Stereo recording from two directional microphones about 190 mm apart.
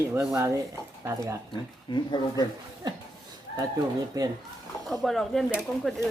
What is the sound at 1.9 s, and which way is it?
Speech, 25° left (ahead or behind).